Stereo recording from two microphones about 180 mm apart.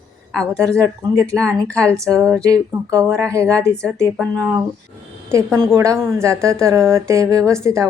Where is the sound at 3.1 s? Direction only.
15° right (ahead or behind).